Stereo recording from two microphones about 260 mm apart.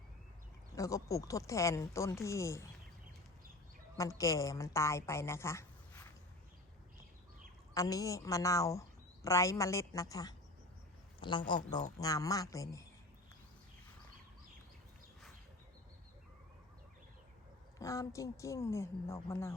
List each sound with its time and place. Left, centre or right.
0.8 s a woman's voice: centre
3.9 s a woman's voice: centre
7.7 s a woman's voice: centre
17.7 s a woman's voice: centre